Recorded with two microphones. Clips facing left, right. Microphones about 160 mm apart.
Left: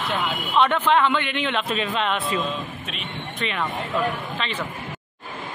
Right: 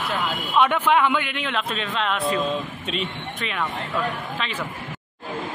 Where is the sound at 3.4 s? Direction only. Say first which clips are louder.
Left 1 dB; centre (ahead or behind).